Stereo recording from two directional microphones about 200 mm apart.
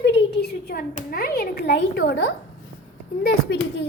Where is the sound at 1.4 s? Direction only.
55° left (ahead or behind).